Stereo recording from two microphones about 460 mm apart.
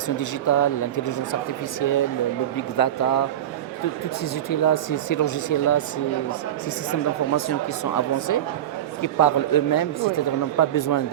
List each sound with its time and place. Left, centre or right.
0.2 s a man's voice: left
4.6 s speech: left
9.0 s a man's voice: left